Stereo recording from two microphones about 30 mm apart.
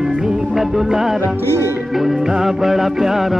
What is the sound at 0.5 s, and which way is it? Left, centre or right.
Music, centre.